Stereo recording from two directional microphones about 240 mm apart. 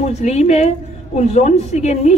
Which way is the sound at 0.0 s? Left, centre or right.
Left.